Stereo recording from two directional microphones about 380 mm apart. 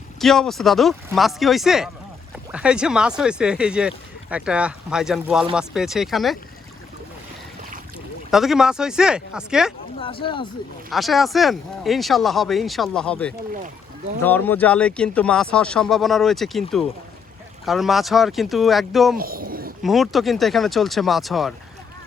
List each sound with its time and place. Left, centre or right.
0.2 s speech: centre
8.3 s speech: centre
10.0 s speech: centre
10.9 s speech: centre
19.1 s a sound: right
19.8 s speech: centre